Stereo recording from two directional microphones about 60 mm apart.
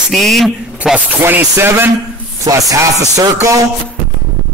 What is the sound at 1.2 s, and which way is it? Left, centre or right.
Speech, right.